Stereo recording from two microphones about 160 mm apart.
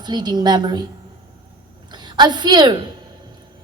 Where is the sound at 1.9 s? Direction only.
25° right (ahead or behind).